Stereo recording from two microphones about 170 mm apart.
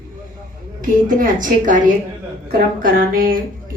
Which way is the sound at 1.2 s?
50° right (ahead or behind).